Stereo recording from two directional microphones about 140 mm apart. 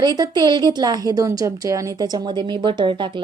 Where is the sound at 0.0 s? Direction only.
30° right (ahead or behind).